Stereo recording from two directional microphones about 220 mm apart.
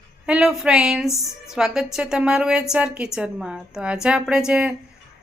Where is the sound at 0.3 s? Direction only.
5° right (ahead or behind).